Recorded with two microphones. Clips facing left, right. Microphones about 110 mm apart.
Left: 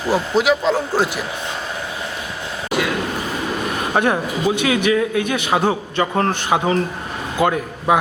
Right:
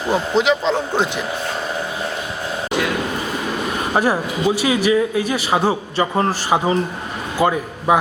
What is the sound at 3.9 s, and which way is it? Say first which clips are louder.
A man's voice: even; 5° right (ahead or behind).